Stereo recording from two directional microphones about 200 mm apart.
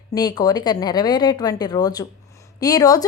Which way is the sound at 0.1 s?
20° left (ahead or behind).